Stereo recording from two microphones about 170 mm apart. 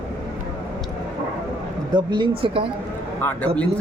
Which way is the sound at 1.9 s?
25° right (ahead or behind).